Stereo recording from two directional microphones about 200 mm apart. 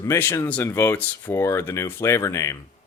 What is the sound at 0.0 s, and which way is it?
Speech, 15° left (ahead or behind).